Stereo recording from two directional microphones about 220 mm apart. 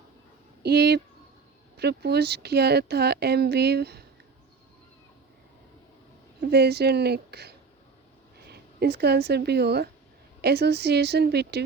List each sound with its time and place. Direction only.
0.6 s speech: 45° right (ahead or behind)
6.4 s speech: 45° right (ahead or behind)